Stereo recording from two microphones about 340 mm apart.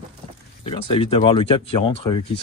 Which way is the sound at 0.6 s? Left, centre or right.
Centre.